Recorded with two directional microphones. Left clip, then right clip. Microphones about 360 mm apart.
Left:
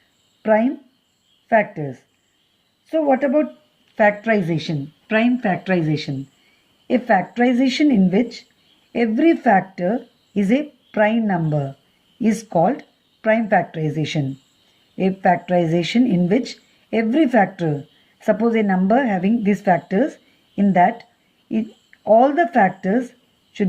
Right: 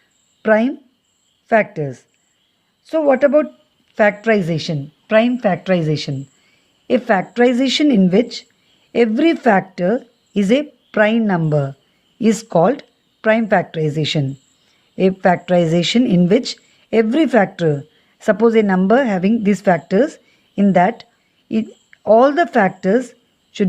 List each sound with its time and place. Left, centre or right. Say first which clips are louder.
0.4 s speech: right 2 dB; right